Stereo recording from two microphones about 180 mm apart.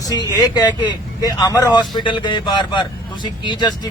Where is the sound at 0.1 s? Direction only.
20° left (ahead or behind).